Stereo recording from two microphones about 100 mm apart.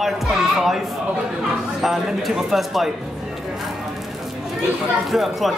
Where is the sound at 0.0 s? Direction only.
Centre (ahead or behind).